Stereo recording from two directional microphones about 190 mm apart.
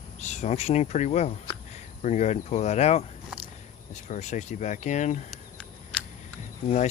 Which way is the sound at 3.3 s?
5° right (ahead or behind).